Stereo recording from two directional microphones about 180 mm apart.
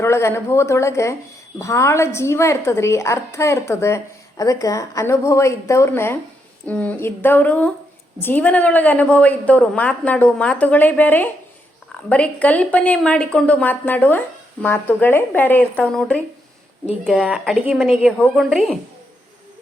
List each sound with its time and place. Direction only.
0.0 s a woman's voice: 15° left (ahead or behind); by 18.8 s centre (ahead or behind)